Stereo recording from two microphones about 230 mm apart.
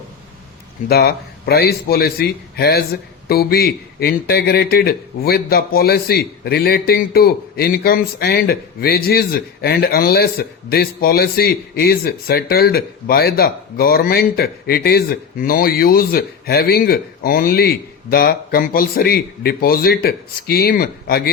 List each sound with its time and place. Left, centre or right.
0.9 s a man's voice: left